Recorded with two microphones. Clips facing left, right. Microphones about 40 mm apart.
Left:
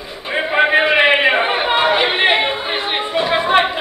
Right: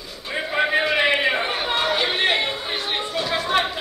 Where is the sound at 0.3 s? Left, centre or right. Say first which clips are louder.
Left 7 dB; left.